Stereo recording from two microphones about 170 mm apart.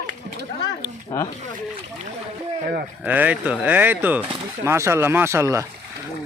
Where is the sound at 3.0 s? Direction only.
10° right (ahead or behind).